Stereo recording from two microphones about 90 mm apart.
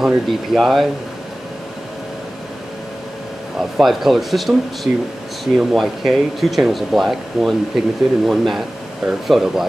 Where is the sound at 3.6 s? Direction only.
5° right (ahead or behind).